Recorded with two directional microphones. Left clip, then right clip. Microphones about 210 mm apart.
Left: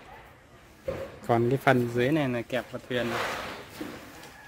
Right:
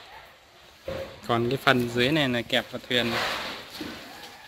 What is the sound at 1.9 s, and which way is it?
A man's voice, centre (ahead or behind).